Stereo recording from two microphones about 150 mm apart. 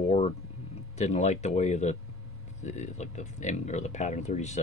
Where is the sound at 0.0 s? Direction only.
45° left (ahead or behind).